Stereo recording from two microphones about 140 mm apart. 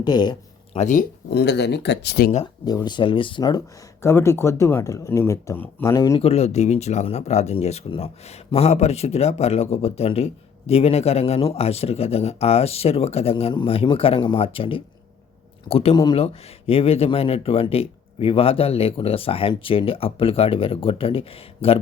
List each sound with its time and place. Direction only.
0.0 s speech: 30° left (ahead or behind)
0.7 s speech: 55° left (ahead or behind)
2.2 s speech: 90° left
2.6 s speech: 30° left (ahead or behind)
4.0 s speech: 20° left (ahead or behind)
6.1 s speech: 45° left (ahead or behind)
13.3 s speech: 35° left (ahead or behind)